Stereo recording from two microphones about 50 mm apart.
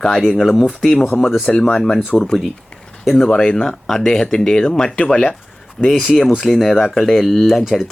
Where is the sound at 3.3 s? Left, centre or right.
Centre.